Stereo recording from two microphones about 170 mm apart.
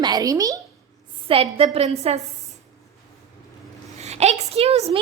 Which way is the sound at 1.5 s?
35° right (ahead or behind).